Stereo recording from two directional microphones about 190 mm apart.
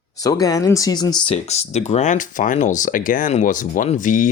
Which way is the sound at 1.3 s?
35° left (ahead or behind).